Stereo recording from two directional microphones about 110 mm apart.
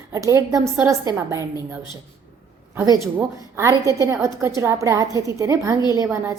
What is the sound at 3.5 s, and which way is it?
A woman's voice, 30° right (ahead or behind).